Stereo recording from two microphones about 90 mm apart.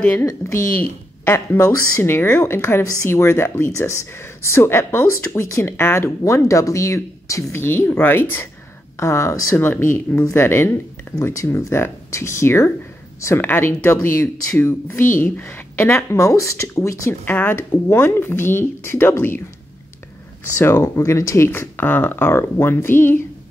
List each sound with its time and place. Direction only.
0.2 s speech: 35° left (ahead or behind)
0.7 s speech: 20° left (ahead or behind)
7.6 s speech: 25° left (ahead or behind)
17.2 s speech: 20° left (ahead or behind)
20.5 s speech: 30° left (ahead or behind)
21.5 s speech: 20° left (ahead or behind)